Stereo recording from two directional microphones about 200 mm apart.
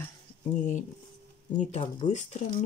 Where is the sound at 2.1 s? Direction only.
35° left (ahead or behind).